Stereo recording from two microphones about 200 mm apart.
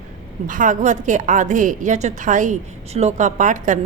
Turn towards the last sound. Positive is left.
turn(degrees=-40)  # may be behind; listen again after turning